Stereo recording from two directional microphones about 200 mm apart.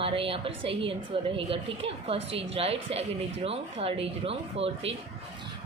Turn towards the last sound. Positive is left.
turn(degrees=-30)  # may be behind; listen again after turning